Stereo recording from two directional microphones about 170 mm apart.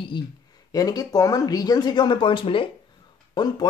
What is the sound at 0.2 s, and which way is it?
Speech, 25° left (ahead or behind).